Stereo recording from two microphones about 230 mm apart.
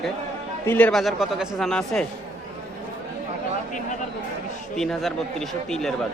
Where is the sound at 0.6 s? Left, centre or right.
Centre.